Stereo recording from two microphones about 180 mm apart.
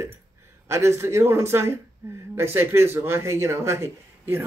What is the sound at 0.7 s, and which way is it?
Speech, 15° right (ahead or behind).